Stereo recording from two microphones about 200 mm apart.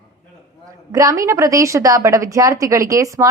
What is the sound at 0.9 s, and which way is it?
A woman's voice, 15° right (ahead or behind).